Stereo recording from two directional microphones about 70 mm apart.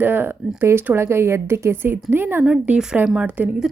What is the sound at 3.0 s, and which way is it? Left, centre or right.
Speech, centre.